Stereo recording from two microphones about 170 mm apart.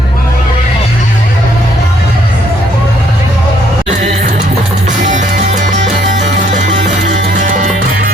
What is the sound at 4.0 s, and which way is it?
Music, 45° right (ahead or behind).